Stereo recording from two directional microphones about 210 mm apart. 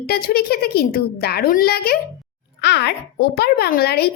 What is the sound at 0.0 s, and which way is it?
A woman's voice, 45° left (ahead or behind).